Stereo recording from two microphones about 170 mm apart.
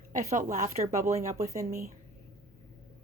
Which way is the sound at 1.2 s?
20° right (ahead or behind).